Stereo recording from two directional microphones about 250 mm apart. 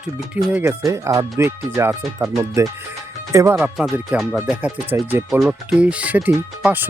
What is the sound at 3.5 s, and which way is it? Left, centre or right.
A man's voice, centre.